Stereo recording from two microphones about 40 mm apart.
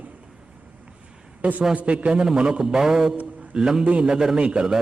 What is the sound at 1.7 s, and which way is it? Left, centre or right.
Speech, right.